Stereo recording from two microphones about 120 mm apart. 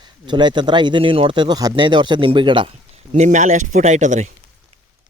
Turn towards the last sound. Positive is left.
turn(degrees=-80)